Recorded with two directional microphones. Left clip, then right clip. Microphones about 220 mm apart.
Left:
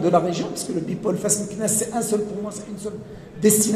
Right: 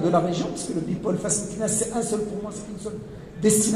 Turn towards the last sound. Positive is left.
turn(degrees=40)  # may be behind; listen again after turning